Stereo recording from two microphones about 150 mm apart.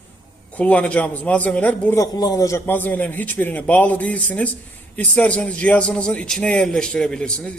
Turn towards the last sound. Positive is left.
turn(degrees=5)  # may be behind; listen again after turning